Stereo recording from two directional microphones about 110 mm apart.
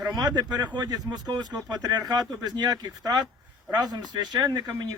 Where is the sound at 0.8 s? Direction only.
35° right (ahead or behind).